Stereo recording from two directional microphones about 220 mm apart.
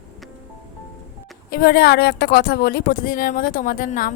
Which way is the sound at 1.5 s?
45° left (ahead or behind).